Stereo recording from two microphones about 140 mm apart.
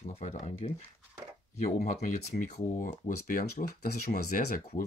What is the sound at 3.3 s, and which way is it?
Speech, 80° left.